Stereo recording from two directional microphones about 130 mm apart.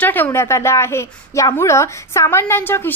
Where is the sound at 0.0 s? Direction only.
15° left (ahead or behind).